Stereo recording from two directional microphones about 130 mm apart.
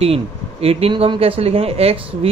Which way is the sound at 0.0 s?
50° right (ahead or behind).